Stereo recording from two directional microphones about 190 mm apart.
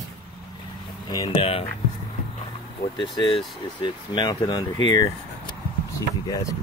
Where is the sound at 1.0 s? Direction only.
20° left (ahead or behind).